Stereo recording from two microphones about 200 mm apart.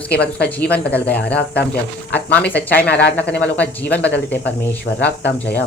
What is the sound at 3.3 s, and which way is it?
Speech, 5° left (ahead or behind).